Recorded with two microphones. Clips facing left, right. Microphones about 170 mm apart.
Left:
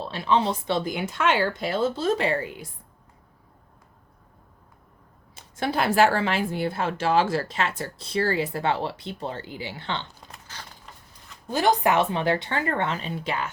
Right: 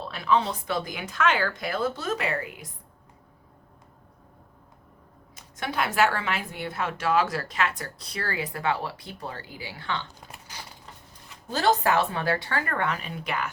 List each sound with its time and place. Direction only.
0.0 s speech: 25° left (ahead or behind)
5.3 s speech: 30° left (ahead or behind)
10.4 s a sound: 10° right (ahead or behind)
11.4 s speech: 15° left (ahead or behind)